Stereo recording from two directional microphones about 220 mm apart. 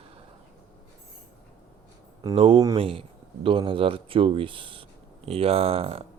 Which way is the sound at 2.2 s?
20° right (ahead or behind).